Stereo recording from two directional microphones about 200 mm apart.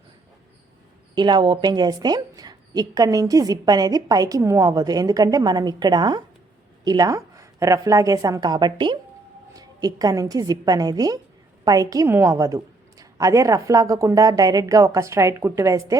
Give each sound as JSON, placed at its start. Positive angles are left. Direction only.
{"t": 1.1, "sound": "a woman's voice", "side_deg": -20}